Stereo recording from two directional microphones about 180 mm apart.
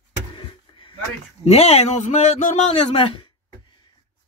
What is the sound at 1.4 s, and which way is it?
A man's voice, 35° left (ahead or behind).